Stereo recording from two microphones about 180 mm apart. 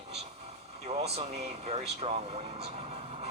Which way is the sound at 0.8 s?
35° right (ahead or behind).